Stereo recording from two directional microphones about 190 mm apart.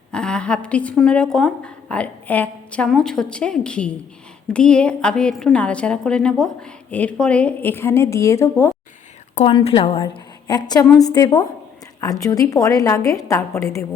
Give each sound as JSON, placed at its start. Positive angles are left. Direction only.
{"t": 0.1, "sound": "a woman's voice", "side_deg": 5}
{"t": 9.3, "sound": "a woman's voice", "side_deg": 30}